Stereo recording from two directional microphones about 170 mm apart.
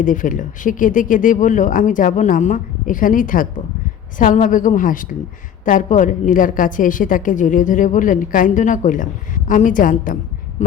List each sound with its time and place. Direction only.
0.0 s a woman's voice: 50° left (ahead or behind)